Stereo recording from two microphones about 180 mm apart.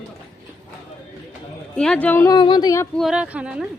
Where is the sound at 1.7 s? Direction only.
5° left (ahead or behind); by 2.8 s 20° left (ahead or behind).